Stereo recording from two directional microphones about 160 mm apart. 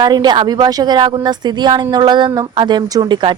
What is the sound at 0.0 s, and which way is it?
Speech, 25° right (ahead or behind).